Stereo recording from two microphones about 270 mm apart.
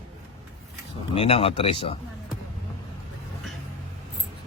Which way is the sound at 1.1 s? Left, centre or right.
Left.